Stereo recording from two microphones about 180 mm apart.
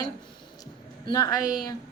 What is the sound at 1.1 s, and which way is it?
Speech, 20° left (ahead or behind).